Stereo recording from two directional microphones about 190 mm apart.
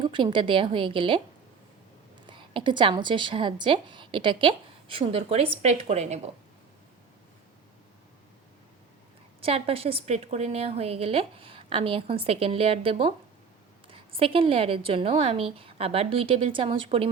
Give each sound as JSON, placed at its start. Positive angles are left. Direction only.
{"t": 0.0, "sound": "a woman's voice", "side_deg": -25}
{"t": 2.2, "sound": "a woman's voice", "side_deg": -25}
{"t": 9.4, "sound": "a woman's voice", "side_deg": -30}